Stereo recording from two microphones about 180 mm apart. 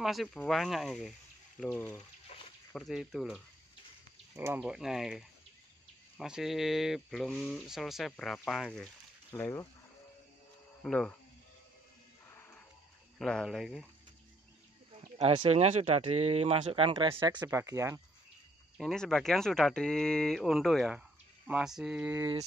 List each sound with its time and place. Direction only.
0.0 s speech: centre (ahead or behind)
1.6 s speech: 10° left (ahead or behind)
2.3 s a sound: 35° left (ahead or behind)
2.7 s speech: centre (ahead or behind)
4.6 s speech: 5° right (ahead or behind); by 9.7 s 10° left (ahead or behind)
10.8 s speech: 5° left (ahead or behind)
12.4 s a sound: 10° left (ahead or behind)
13.2 s speech: centre (ahead or behind)
15.1 s speech: 30° right (ahead or behind)
17.5 s speech: 15° right (ahead or behind)
18.8 s speech: 5° left (ahead or behind)